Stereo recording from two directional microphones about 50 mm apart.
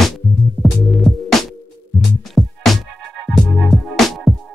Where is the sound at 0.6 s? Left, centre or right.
Right.